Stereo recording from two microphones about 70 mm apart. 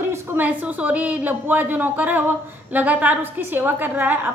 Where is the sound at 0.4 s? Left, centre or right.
Right.